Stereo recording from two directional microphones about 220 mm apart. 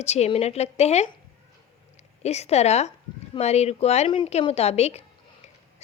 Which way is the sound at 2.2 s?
30° left (ahead or behind).